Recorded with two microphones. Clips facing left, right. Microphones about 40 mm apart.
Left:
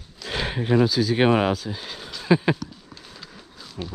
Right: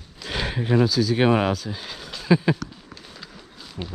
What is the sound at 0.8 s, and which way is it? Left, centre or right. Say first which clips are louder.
Speech: right 1 dB; left.